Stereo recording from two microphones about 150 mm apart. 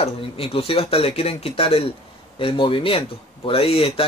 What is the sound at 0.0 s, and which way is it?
Speech, 40° left (ahead or behind).